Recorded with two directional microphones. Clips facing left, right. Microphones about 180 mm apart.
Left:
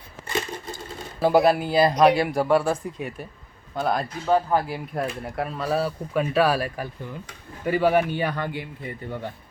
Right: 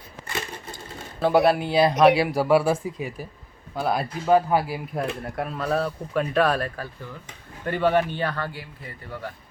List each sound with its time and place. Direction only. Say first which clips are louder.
1.2 s speech: left 1 dB; centre (ahead or behind); by 9.3 s 20° left (ahead or behind)